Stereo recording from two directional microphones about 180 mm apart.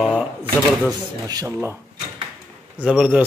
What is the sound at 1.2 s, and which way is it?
Speech, 20° right (ahead or behind).